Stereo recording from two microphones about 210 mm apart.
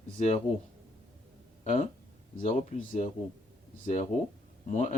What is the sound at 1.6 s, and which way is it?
Speech, 35° left (ahead or behind).